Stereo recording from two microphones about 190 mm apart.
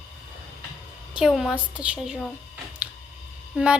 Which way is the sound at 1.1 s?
5° right (ahead or behind).